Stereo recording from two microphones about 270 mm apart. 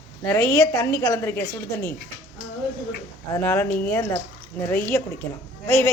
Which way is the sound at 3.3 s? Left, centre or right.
Centre.